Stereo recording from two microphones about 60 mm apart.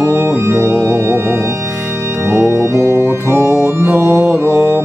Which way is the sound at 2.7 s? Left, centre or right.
Right.